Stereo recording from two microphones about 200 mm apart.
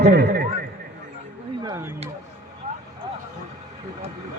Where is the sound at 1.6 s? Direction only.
20° right (ahead or behind).